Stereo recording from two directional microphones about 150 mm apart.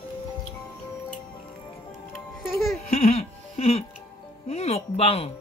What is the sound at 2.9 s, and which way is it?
Music, 40° left (ahead or behind).